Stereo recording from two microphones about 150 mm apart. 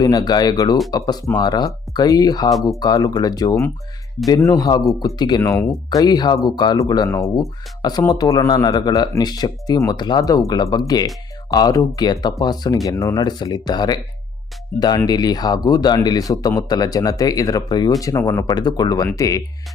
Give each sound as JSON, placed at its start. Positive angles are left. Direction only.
{"t": 0.0, "sound": "speech", "side_deg": 25}